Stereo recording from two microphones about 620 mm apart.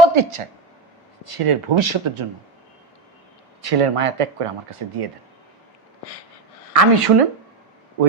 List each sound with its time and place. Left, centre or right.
0.0 s speech: right
3.6 s speech: right
6.7 s speech: right